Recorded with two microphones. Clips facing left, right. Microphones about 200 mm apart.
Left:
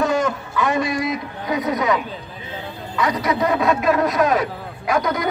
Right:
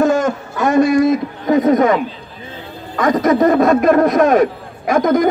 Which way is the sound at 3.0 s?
45° right (ahead or behind).